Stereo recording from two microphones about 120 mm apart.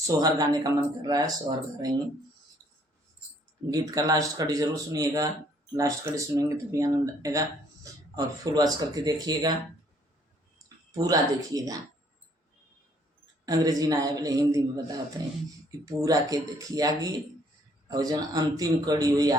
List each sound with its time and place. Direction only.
0.0 s speech: 35° right (ahead or behind)
3.7 s speech: 30° right (ahead or behind)
10.9 s speech: 30° right (ahead or behind)
13.4 s speech: 30° right (ahead or behind)